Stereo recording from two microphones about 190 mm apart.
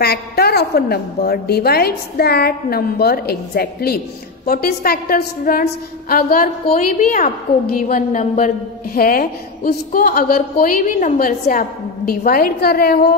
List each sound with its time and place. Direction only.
0.0 s a woman's voice: 55° left (ahead or behind)